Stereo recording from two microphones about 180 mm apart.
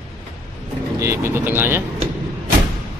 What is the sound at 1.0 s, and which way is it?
Speech, 15° right (ahead or behind).